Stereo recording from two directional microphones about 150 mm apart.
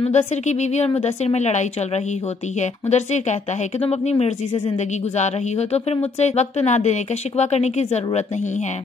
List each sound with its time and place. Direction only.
0.0 s a woman's voice: 50° left (ahead or behind)
2.9 s a woman's voice: 50° left (ahead or behind)